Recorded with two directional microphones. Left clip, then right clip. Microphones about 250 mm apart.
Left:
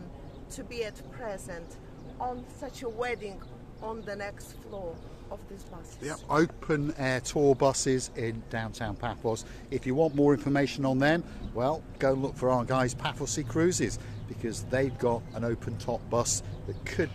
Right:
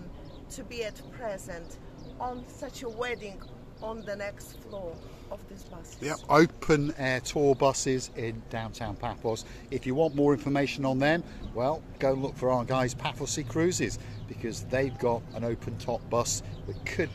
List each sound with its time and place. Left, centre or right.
0.6 s speech: centre
6.0 s speech: right
7.0 s speech: centre